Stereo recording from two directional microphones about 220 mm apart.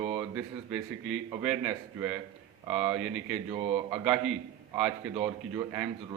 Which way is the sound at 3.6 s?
25° right (ahead or behind).